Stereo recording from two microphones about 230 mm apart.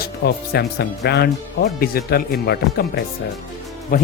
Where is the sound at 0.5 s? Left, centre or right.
Left.